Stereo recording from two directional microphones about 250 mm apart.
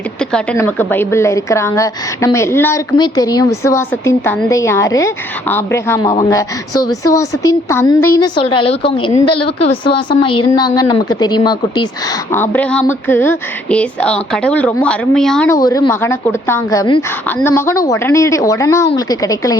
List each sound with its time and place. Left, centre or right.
0.3 s a woman's voice: centre
15.5 s a woman's voice: centre